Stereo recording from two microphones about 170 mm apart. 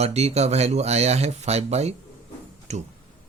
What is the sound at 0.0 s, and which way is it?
Speech, 40° right (ahead or behind).